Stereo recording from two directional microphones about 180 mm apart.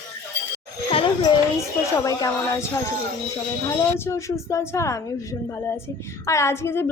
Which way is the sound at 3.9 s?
15° left (ahead or behind).